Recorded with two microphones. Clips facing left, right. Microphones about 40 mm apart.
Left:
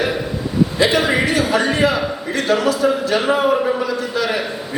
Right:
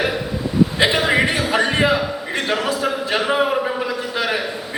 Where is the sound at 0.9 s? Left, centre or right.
Centre.